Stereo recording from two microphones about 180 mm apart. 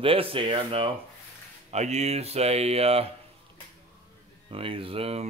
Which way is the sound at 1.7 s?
40° right (ahead or behind).